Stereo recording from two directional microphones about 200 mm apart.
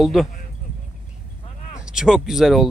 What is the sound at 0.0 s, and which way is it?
Speech, centre (ahead or behind).